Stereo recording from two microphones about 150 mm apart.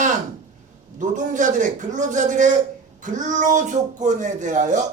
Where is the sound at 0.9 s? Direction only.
55° right (ahead or behind).